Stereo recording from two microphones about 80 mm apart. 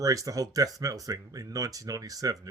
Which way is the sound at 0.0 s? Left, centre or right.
Right.